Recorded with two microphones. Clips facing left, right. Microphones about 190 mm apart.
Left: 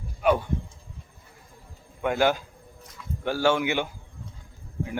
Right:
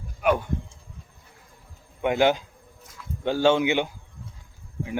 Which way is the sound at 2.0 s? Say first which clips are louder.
Right 2 dB; 20° right (ahead or behind).